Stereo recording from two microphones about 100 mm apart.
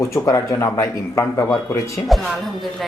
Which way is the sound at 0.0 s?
30° left (ahead or behind).